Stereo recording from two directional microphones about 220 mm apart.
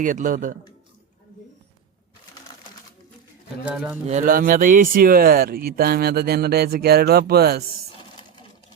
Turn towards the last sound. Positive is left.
turn(degrees=-45)  # may be behind; listen again after turning